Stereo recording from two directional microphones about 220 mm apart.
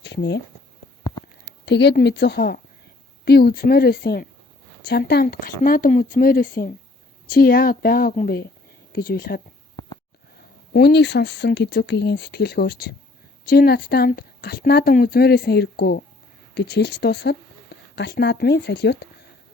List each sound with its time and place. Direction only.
0.0 s a sound: 50° left (ahead or behind)
1.6 s speech: 50° left (ahead or behind)
10.7 s speech: 50° left (ahead or behind)